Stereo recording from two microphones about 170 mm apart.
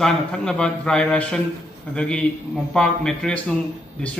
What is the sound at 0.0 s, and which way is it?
Speech, 5° left (ahead or behind).